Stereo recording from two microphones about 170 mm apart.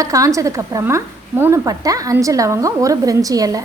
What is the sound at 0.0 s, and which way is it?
A woman's voice, 20° right (ahead or behind).